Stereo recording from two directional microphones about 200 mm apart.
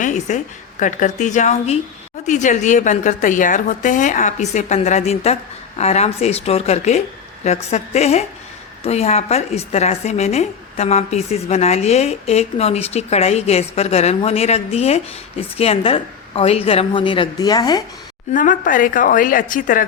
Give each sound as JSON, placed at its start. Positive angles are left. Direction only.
{"t": 0.0, "sound": "a woman's voice", "side_deg": 35}
{"t": 18.3, "sound": "a woman's voice", "side_deg": 40}